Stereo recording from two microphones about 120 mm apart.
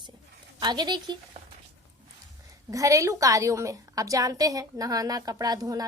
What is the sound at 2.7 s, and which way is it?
A woman's voice, 30° right (ahead or behind).